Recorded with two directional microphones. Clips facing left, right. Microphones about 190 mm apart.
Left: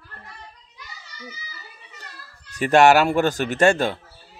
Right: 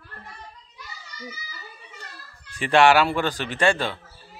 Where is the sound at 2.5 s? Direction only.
45° left (ahead or behind).